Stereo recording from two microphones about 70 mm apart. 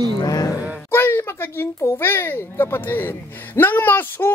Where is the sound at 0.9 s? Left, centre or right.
Left.